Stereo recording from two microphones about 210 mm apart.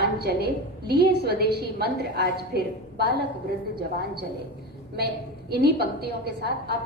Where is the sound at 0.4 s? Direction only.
50° right (ahead or behind).